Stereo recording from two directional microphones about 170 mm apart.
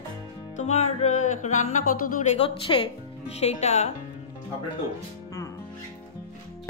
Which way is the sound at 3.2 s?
40° left (ahead or behind).